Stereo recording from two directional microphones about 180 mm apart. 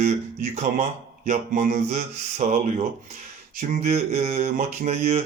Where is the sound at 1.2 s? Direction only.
40° right (ahead or behind).